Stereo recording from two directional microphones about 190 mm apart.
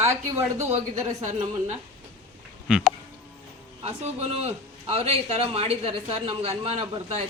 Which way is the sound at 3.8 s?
35° right (ahead or behind).